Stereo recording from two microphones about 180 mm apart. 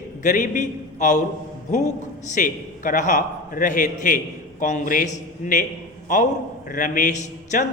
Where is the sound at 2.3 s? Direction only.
45° left (ahead or behind).